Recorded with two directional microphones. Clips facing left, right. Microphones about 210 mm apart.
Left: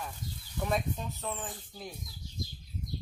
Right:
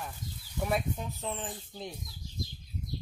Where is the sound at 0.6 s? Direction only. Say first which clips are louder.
Right 1 dB; 10° right (ahead or behind).